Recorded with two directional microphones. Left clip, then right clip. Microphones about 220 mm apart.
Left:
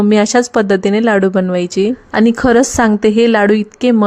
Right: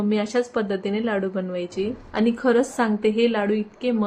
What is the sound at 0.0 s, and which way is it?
Speech, 50° left (ahead or behind).